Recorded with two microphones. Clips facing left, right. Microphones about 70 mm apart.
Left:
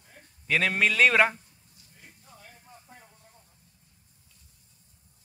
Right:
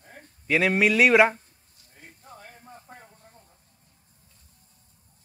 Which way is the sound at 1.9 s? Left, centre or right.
Right.